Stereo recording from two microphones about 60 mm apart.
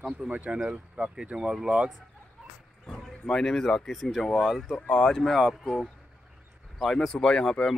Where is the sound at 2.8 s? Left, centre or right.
Centre.